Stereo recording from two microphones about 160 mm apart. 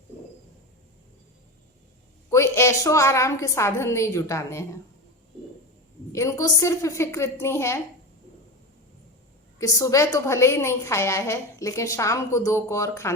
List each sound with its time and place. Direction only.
2.3 s a woman's voice: 15° left (ahead or behind)
6.1 s a woman's voice: 20° left (ahead or behind)
9.6 s a woman's voice: 20° left (ahead or behind)